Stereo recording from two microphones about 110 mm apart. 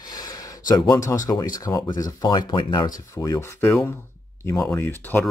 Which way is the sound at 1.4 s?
35° left (ahead or behind).